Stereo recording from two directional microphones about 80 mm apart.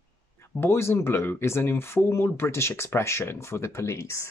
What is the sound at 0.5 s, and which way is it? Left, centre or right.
Speech, left.